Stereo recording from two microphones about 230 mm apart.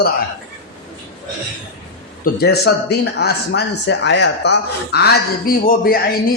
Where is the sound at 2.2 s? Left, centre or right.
Left.